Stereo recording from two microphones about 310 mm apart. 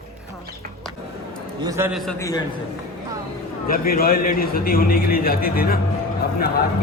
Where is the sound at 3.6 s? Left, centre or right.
Left.